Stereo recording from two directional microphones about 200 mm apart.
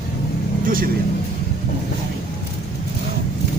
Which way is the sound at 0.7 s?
45° right (ahead or behind).